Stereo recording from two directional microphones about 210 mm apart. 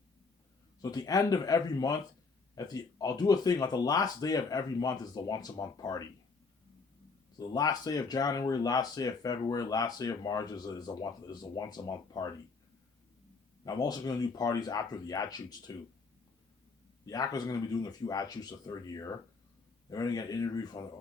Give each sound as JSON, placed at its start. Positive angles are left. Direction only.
{"t": 0.8, "sound": "speech", "side_deg": 20}
{"t": 7.3, "sound": "speech", "side_deg": 20}
{"t": 13.7, "sound": "speech", "side_deg": 20}
{"t": 17.1, "sound": "speech", "side_deg": 15}